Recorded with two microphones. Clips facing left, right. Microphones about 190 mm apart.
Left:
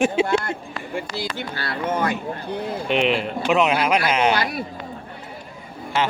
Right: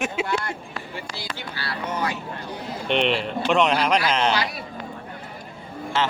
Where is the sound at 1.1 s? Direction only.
50° left (ahead or behind).